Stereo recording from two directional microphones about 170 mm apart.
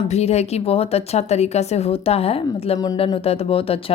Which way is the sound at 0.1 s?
40° left (ahead or behind).